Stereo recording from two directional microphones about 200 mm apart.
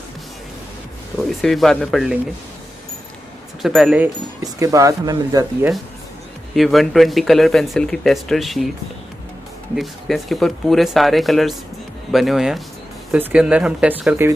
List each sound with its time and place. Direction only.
1.4 s speech: centre (ahead or behind)
3.6 s speech: centre (ahead or behind)
4.4 s speech: 15° right (ahead or behind)
6.5 s speech: centre (ahead or behind)
9.8 s speech: centre (ahead or behind)